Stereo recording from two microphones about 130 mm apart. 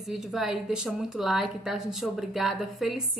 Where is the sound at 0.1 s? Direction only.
5° right (ahead or behind).